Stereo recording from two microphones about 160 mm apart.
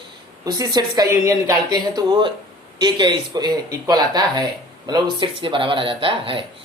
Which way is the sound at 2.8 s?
25° right (ahead or behind).